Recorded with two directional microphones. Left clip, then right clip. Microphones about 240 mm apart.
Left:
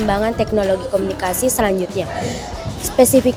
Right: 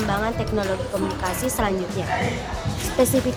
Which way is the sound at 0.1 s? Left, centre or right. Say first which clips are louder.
Left 9 dB; centre.